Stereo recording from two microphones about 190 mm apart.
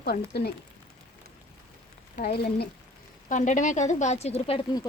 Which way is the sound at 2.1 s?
55° left (ahead or behind).